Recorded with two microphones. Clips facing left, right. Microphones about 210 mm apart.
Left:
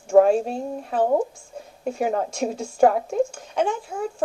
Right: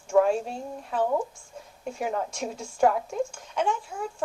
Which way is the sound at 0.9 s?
40° left (ahead or behind).